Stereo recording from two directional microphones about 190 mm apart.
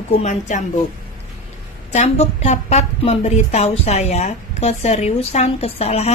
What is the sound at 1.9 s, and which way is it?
A woman's voice, 35° left (ahead or behind).